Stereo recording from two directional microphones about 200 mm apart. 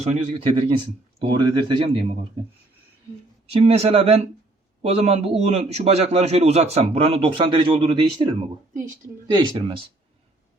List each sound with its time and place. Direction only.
0.0 s a man's voice: 35° right (ahead or behind)
3.5 s a man's voice: 30° right (ahead or behind)
9.3 s speech: 25° right (ahead or behind)